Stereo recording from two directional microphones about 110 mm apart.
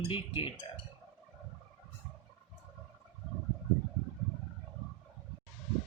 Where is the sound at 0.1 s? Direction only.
50° left (ahead or behind).